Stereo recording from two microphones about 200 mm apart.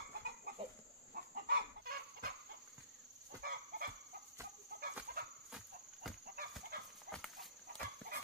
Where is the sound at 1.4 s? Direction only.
50° right (ahead or behind).